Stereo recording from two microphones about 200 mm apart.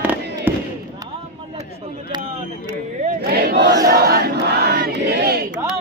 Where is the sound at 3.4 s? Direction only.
55° right (ahead or behind).